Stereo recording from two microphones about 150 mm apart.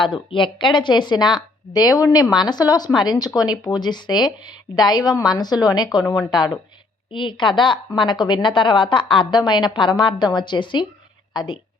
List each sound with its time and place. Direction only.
0.0 s a woman's voice: 35° left (ahead or behind)